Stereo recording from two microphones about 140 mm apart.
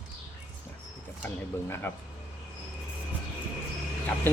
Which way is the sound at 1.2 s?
15° left (ahead or behind).